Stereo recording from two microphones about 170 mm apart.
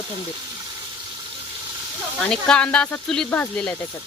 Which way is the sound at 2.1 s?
5° left (ahead or behind).